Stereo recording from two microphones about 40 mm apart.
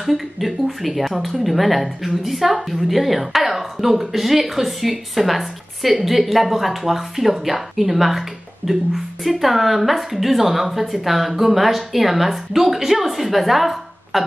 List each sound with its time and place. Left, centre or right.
0.0 s speech: centre